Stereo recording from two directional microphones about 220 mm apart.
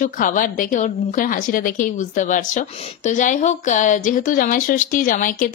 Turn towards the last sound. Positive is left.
turn(degrees=40)  # may be behind; listen again after turning